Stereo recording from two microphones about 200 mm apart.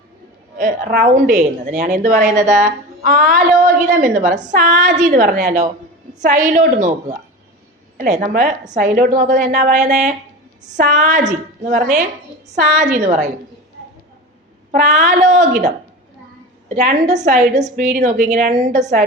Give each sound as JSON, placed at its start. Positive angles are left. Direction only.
{"t": 0.6, "sound": "a woman's voice", "side_deg": -45}
{"t": 14.7, "sound": "a woman's voice", "side_deg": -40}
{"t": 16.6, "sound": "a woman's voice", "side_deg": -35}